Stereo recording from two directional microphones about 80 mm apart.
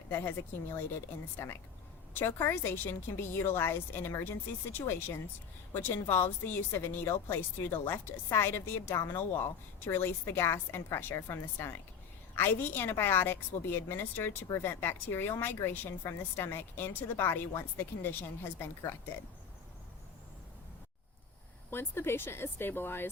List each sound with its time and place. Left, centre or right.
0.1 s a woman's voice: left
21.7 s a woman's voice: left